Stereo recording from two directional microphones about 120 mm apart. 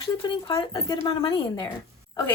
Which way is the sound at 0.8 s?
35° left (ahead or behind).